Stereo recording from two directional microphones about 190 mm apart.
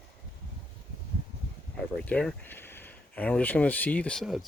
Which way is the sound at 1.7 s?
5° left (ahead or behind).